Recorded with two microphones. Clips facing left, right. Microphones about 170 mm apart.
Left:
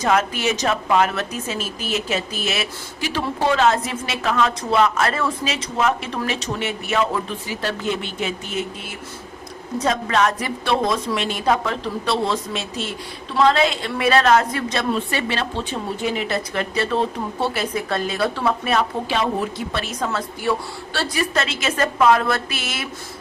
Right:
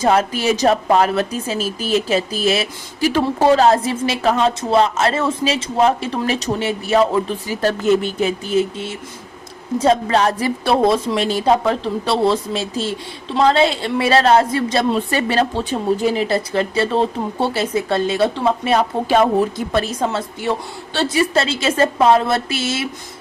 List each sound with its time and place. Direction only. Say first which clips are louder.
0.0 s a woman's voice: right 4 dB; 30° right (ahead or behind)
3.1 s a woman's voice: right 6 dB; 45° right (ahead or behind); by 18.9 s 30° right (ahead or behind)
19.0 s a woman's voice: right 7 dB; 45° right (ahead or behind)
20.0 s a woman's voice: right 4 dB; 25° right (ahead or behind)